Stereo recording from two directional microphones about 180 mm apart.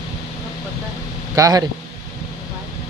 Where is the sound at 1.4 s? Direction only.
20° right (ahead or behind).